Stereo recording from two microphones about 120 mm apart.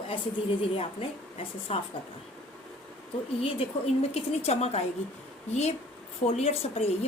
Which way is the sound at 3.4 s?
50° left (ahead or behind).